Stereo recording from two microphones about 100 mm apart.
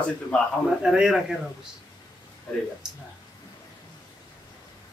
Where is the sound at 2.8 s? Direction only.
5° right (ahead or behind).